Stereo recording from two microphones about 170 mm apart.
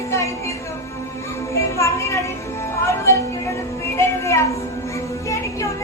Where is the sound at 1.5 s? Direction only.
15° left (ahead or behind).